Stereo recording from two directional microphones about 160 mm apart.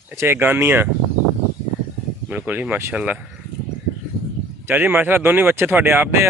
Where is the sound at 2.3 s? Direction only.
10° right (ahead or behind).